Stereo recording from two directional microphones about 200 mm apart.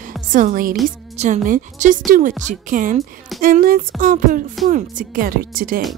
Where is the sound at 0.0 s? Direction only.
40° right (ahead or behind).